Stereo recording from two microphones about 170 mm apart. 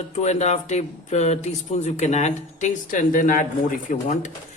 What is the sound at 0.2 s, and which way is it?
Speech, 40° left (ahead or behind).